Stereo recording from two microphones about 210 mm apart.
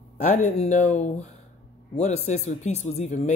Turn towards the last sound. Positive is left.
turn(degrees=30)  # may be behind; listen again after turning